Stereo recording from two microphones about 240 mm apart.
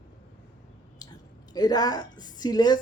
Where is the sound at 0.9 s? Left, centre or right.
Centre.